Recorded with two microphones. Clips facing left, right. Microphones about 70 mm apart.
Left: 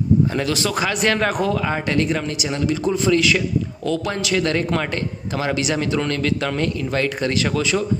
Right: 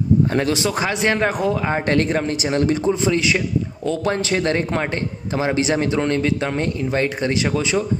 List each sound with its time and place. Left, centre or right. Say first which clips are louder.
0.5 s a man's voice: right 1 dB; right
1.9 s speech: right 4 dB; right
2.8 s a man's voice: left 1 dB; right